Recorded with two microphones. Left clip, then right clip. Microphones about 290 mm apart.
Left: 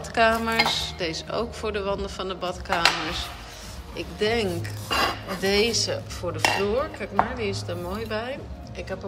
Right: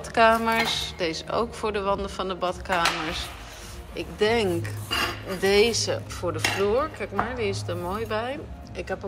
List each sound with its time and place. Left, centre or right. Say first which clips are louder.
0.1 s dishes: right 2 dB; centre